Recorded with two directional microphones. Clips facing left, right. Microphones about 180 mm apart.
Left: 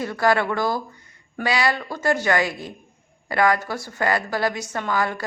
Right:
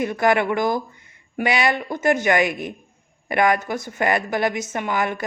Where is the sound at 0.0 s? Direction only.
20° right (ahead or behind).